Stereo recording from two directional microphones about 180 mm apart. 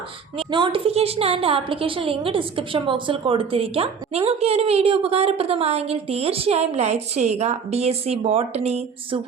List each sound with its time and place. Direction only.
0.3 s a woman's voice: 30° right (ahead or behind)